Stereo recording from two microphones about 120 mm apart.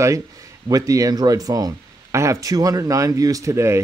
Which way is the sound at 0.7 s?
30° right (ahead or behind).